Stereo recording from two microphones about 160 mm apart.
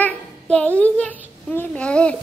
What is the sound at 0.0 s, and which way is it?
A child's voice, 10° left (ahead or behind).